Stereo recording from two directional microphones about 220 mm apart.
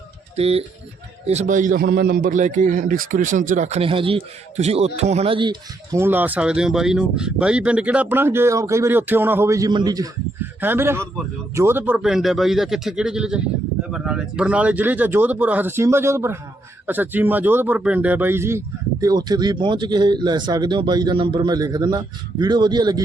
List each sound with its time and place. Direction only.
0.3 s a man's voice: 25° right (ahead or behind)